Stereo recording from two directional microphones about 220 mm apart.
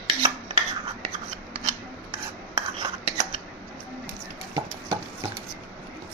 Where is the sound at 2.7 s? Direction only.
20° right (ahead or behind).